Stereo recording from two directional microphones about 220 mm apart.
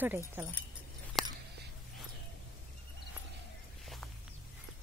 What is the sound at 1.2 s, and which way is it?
Whispering, centre (ahead or behind).